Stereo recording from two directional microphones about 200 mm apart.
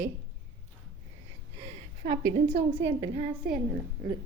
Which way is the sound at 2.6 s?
60° right (ahead or behind).